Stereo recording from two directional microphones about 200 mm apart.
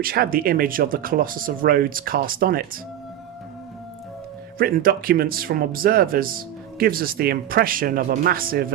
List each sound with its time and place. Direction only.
0.0 s speech: 45° right (ahead or behind)
4.5 s speech: 45° right (ahead or behind)